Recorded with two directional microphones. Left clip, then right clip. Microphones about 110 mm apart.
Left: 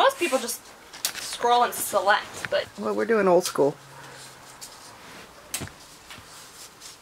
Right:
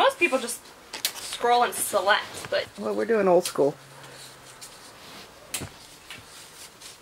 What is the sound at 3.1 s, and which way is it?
Speech, 20° left (ahead or behind).